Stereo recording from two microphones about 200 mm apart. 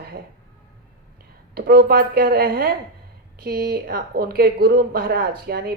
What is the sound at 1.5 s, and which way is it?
Speech, 50° right (ahead or behind).